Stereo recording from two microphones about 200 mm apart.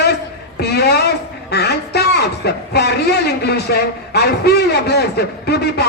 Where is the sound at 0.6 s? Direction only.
55° left (ahead or behind).